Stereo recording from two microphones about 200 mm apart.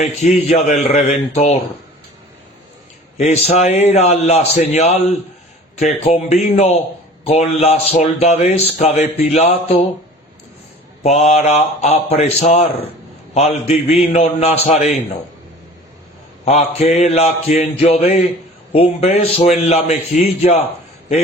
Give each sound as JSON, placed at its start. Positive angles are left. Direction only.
{"t": 0.0, "sound": "speech", "side_deg": 35}
{"t": 3.2, "sound": "speech", "side_deg": 35}
{"t": 11.0, "sound": "speech", "side_deg": 35}
{"t": 16.5, "sound": "speech", "side_deg": 35}